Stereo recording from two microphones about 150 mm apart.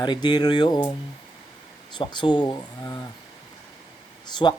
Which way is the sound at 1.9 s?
30° left (ahead or behind).